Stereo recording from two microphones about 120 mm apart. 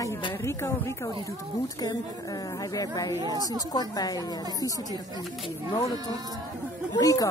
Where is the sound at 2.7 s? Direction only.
30° left (ahead or behind).